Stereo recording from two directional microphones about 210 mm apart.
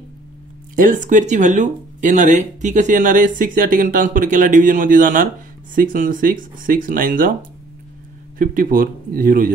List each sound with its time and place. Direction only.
0.7 s speech: 40° right (ahead or behind)
8.4 s speech: 40° right (ahead or behind)